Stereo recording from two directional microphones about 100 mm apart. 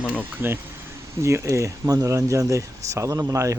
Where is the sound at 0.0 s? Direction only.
15° right (ahead or behind).